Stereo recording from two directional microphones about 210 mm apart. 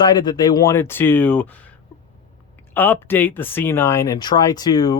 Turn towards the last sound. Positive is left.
turn(degrees=20)  # may be behind; listen again after turning